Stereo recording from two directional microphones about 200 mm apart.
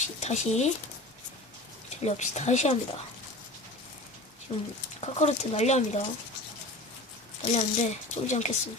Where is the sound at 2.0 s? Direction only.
35° left (ahead or behind).